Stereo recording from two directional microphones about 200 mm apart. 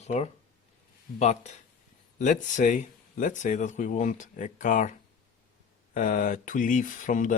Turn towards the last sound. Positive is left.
turn(degrees=40)  # may be behind; listen again after turning